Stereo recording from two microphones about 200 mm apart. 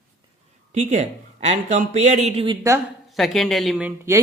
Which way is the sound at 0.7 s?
35° right (ahead or behind).